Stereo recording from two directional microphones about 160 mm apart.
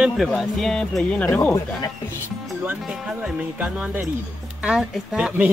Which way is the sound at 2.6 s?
10° right (ahead or behind).